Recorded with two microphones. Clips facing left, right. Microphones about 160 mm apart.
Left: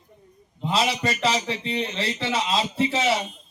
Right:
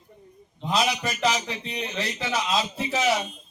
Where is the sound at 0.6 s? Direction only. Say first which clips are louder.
Left 1 dB; 30° left (ahead or behind).